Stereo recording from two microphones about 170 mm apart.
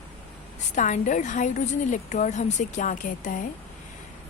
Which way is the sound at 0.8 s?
50° left (ahead or behind).